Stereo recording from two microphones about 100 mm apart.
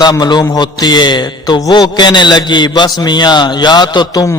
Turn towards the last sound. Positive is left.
turn(degrees=45)  # may be behind; listen again after turning